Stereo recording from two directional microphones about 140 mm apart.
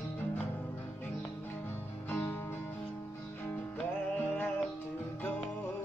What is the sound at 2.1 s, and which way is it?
Music, 15° left (ahead or behind).